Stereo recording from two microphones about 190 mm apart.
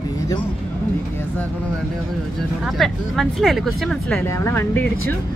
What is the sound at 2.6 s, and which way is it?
Speech, centre (ahead or behind).